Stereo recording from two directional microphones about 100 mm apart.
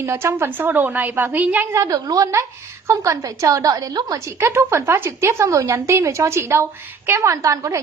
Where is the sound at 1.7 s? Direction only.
35° right (ahead or behind).